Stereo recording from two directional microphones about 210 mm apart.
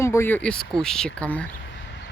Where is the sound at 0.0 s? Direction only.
10° left (ahead or behind).